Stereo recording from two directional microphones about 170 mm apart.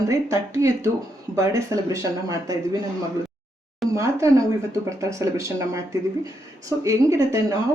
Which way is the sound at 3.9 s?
20° right (ahead or behind).